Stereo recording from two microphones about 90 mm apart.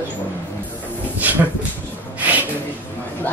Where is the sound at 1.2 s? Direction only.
20° right (ahead or behind).